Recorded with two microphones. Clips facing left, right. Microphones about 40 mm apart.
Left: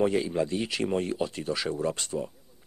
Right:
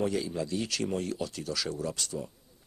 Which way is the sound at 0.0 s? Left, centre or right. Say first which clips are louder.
Left 5 dB; left.